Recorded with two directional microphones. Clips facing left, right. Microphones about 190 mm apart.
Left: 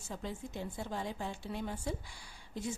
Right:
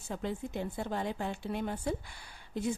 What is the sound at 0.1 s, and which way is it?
A woman's voice, 60° right (ahead or behind).